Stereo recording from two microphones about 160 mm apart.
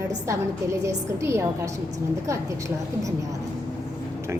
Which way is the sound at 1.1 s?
15° right (ahead or behind).